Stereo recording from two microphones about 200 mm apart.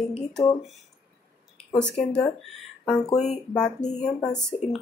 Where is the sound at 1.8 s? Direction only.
5° left (ahead or behind).